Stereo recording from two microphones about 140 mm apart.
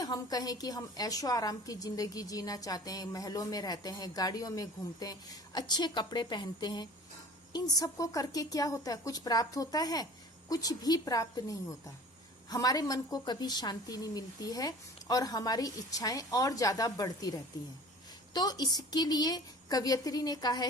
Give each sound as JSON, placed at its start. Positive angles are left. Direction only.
{"t": 0.0, "sound": "a woman's voice", "side_deg": 25}